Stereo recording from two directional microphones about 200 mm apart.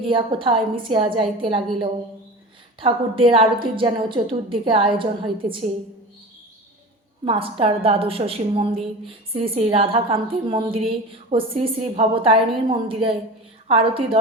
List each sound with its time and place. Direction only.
0.0 s a woman's voice: 25° right (ahead or behind)
7.3 s a woman's voice: 25° right (ahead or behind)